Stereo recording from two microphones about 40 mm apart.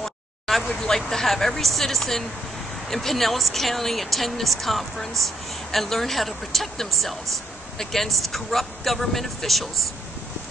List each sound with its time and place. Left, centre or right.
0.0 s a sound: centre
0.7 s speech: left
0.9 s a woman's voice: centre